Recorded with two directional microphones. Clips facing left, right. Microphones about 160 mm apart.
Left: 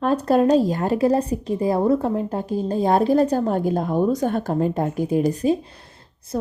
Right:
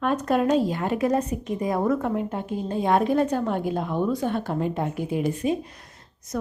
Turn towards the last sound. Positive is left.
turn(degrees=30)  # may be behind; listen again after turning